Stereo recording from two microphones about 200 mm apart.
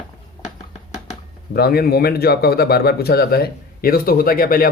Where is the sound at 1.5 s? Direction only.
50° left (ahead or behind).